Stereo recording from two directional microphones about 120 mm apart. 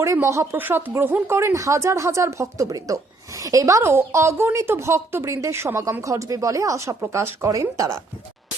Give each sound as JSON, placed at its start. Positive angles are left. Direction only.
{"t": 0.0, "sound": "speech", "side_deg": -25}